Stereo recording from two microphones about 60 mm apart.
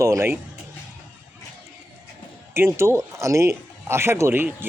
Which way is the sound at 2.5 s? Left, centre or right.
Right.